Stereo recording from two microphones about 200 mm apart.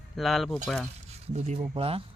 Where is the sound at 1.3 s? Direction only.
35° right (ahead or behind).